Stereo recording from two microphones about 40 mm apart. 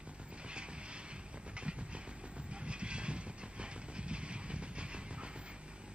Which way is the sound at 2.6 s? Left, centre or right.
Right.